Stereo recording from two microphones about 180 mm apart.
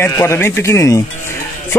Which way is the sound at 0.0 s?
15° left (ahead or behind).